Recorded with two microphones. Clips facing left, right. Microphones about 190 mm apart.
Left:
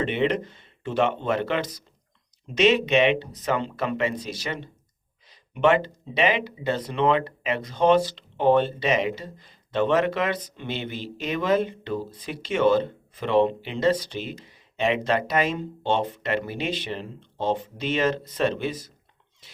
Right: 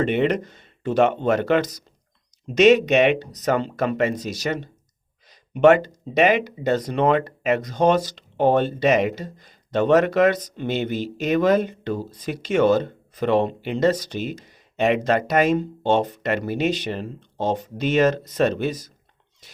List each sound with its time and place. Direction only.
0.0 s speech: 45° right (ahead or behind)